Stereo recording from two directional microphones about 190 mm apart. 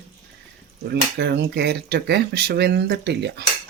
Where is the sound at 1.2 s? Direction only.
60° right (ahead or behind).